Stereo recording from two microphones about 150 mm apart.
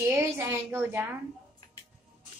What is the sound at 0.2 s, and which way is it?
Music, 15° right (ahead or behind).